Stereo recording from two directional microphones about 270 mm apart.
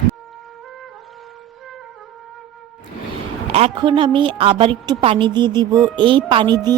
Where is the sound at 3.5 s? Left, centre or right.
Right.